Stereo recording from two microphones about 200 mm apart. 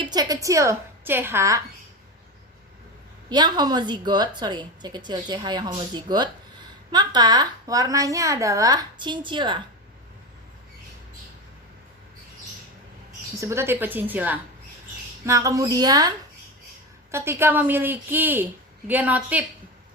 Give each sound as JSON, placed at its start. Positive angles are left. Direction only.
{"t": 0.0, "sound": "a woman's voice", "side_deg": -20}
{"t": 3.2, "sound": "a woman's voice", "side_deg": -20}
{"t": 13.4, "sound": "a woman's voice", "side_deg": -15}